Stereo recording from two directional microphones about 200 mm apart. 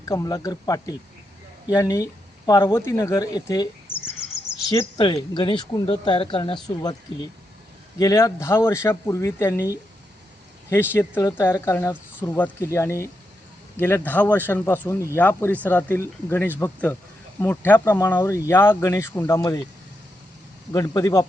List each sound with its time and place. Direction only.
0.1 s speech: 15° left (ahead or behind)
20.7 s speech: 15° left (ahead or behind)